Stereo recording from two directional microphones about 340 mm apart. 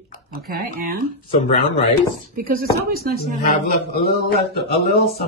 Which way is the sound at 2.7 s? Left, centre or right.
Left.